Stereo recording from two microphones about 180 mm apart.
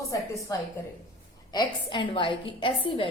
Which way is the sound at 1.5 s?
25° left (ahead or behind).